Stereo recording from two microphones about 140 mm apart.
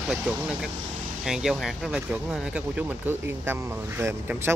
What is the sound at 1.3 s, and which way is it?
Speech, 5° right (ahead or behind).